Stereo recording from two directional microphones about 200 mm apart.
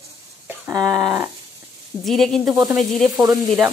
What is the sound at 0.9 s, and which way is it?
Speech, 20° right (ahead or behind).